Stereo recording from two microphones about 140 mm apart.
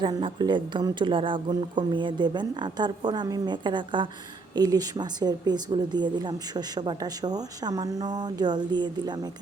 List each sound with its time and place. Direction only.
0.0 s speech: 35° right (ahead or behind)